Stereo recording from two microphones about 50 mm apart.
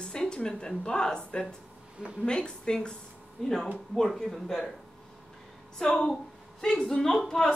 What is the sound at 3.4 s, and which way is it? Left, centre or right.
Speech, centre.